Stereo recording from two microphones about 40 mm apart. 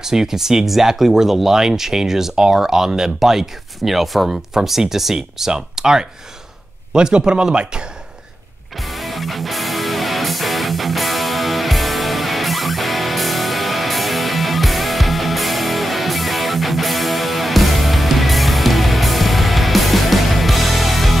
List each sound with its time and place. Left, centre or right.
0.0 s speech: centre
8.7 s music: centre